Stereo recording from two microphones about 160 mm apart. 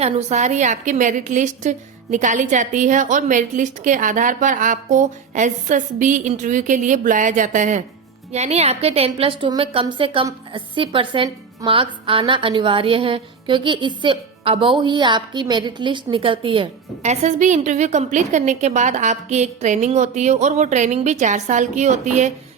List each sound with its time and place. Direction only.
0.0 s a woman's voice: 45° right (ahead or behind)